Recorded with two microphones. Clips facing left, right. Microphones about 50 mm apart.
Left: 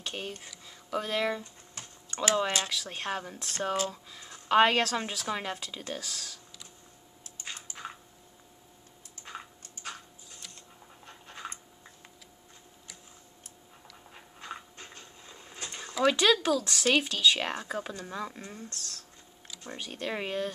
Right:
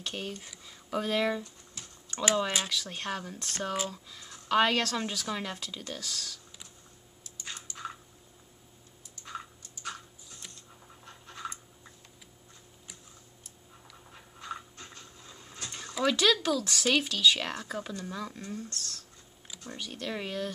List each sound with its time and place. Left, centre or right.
0.0 s a sound: centre
0.7 s speech: centre
1.8 s typing: left
2.4 s speech: centre
7.2 s typing: left
9.1 s typing: left
11.1 s scratch: left
14.1 s a sound: left
16.0 s speech: centre
18.8 s speech: centre
19.6 s speech: left